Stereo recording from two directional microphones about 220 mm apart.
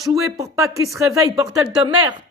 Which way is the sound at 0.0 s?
15° right (ahead or behind).